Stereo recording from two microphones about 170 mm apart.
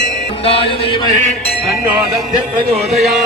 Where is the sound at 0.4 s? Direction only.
35° left (ahead or behind).